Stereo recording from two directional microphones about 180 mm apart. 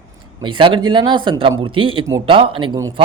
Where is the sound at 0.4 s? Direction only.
30° right (ahead or behind).